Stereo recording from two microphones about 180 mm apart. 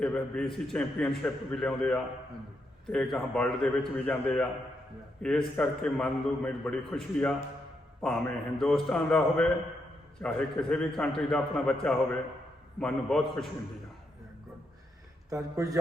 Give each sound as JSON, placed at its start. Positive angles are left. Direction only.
{"t": 0.0, "sound": "a man's voice", "side_deg": 5}
{"t": 15.3, "sound": "speech", "side_deg": -20}